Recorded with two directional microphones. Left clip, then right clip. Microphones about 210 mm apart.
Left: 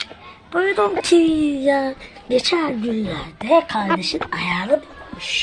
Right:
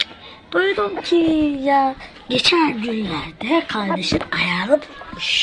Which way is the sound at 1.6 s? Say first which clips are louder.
Right 2 dB; 15° left (ahead or behind).